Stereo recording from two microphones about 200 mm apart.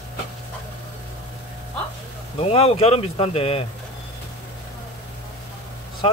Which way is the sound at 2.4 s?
30° left (ahead or behind).